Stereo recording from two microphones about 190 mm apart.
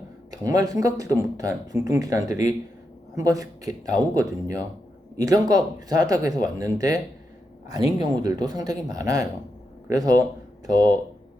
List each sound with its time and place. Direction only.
0.3 s speech: 20° right (ahead or behind)